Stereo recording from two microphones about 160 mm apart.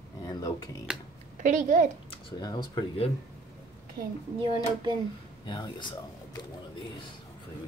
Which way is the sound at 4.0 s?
20° right (ahead or behind).